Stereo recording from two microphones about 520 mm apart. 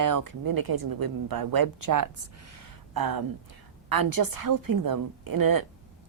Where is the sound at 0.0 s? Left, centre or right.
Right.